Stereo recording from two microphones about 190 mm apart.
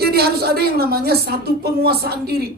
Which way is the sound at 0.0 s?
55° right (ahead or behind).